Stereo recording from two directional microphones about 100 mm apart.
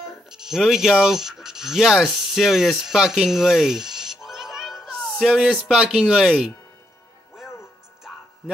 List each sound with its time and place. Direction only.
0.3 s speech: 5° right (ahead or behind)